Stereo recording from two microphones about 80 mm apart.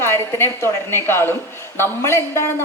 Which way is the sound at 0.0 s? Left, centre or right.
Left.